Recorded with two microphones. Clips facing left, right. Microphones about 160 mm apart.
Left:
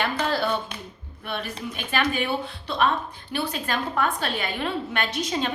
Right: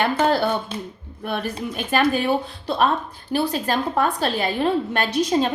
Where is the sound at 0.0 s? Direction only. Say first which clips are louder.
Right 6 dB; 50° right (ahead or behind).